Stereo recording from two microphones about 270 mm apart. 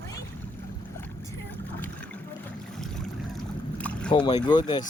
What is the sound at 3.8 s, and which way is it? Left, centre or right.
Boat, centre.